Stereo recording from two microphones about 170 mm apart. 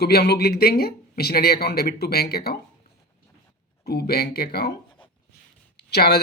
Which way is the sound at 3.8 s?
70° left (ahead or behind).